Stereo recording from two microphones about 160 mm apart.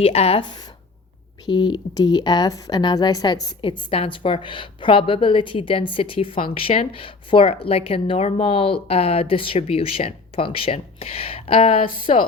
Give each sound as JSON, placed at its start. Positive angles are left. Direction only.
{"t": 0.0, "sound": "speech", "side_deg": 40}